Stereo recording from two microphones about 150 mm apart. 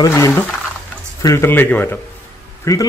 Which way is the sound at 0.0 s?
20° left (ahead or behind).